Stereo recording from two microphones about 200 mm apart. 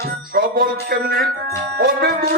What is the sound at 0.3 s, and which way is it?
Speech, 45° right (ahead or behind).